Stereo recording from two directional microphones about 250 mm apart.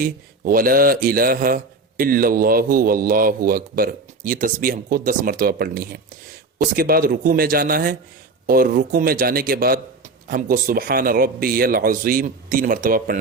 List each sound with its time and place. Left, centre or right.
0.0 s speech: right